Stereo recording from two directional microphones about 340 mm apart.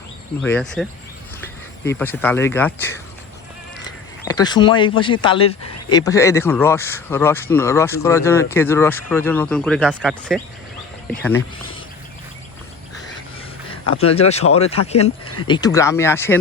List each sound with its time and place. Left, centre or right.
0.4 s speech: centre
4.3 s speech: centre
14.0 s speech: centre